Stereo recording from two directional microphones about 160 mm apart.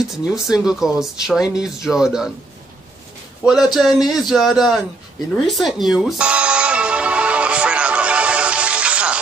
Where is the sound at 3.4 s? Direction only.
15° left (ahead or behind).